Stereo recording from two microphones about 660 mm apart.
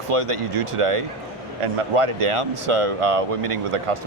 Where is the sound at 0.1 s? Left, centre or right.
Right.